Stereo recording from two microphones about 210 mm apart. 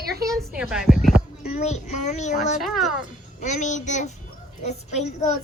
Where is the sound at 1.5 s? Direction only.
35° left (ahead or behind).